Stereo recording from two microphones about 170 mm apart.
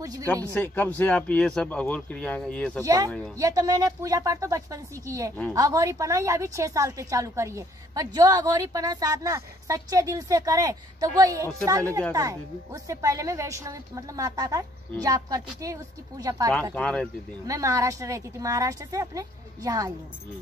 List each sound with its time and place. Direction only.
0.0 s speech: 20° right (ahead or behind)
0.5 s speech: 10° left (ahead or behind)
2.8 s a woman's voice: 20° right (ahead or behind)
16.7 s speech: 5° left (ahead or behind)
17.5 s a woman's voice: 20° right (ahead or behind)